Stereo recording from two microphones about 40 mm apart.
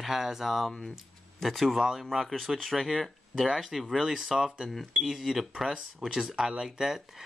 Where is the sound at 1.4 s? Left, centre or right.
Centre.